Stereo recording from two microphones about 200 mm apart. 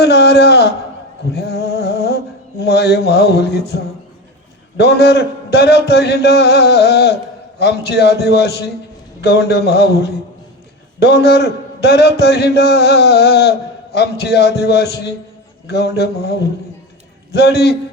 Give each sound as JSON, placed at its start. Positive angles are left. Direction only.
{"t": 0.0, "sound": "a man's voice", "side_deg": 55}
{"t": 1.3, "sound": "a sound", "side_deg": 55}
{"t": 4.8, "sound": "a man's voice", "side_deg": 55}